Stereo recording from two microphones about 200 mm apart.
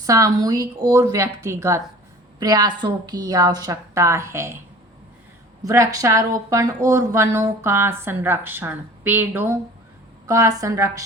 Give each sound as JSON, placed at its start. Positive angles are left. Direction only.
{"t": 0.0, "sound": "a woman's voice", "side_deg": -15}
{"t": 5.6, "sound": "a woman's voice", "side_deg": -15}